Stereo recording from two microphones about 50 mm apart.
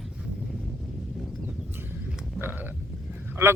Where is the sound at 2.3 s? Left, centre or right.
Right.